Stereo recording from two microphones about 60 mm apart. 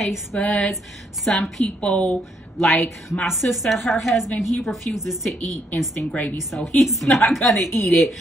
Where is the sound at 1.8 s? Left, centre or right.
Centre.